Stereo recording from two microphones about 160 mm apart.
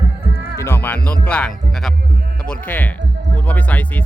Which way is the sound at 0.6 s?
15° left (ahead or behind).